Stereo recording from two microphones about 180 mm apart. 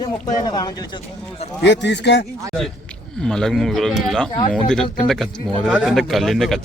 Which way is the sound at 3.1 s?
5° left (ahead or behind).